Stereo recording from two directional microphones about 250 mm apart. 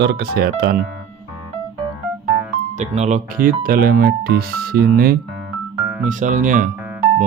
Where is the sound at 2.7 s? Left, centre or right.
Right.